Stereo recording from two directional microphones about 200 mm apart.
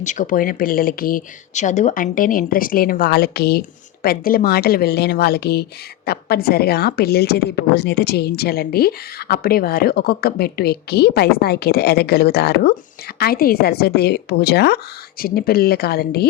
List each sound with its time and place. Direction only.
0.0 s a woman's voice: 40° left (ahead or behind)